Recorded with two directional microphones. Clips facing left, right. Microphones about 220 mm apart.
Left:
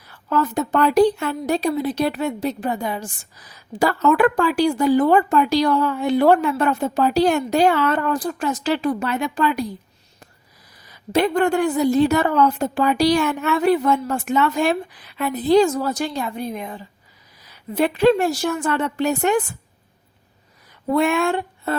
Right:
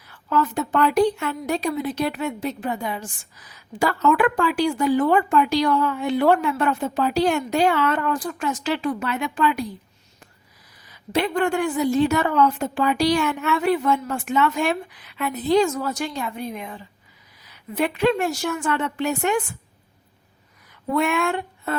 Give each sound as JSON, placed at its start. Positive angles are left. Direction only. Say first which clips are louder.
{"t": 0.1, "sound": "a woman's voice", "louder": "left 2 dB", "side_deg": 40}
{"t": 10.8, "sound": "a woman's voice", "louder": "left 4 dB", "side_deg": 40}
{"t": 20.9, "sound": "a woman's voice", "louder": "left 3 dB", "side_deg": 30}